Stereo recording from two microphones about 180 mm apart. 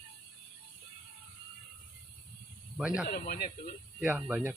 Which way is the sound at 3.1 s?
55° left (ahead or behind).